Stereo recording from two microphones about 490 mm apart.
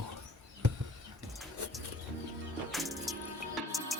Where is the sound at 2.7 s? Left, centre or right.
Centre.